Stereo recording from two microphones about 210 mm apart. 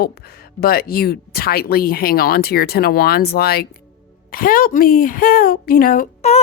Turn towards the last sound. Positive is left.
turn(degrees=30)  # may be behind; listen again after turning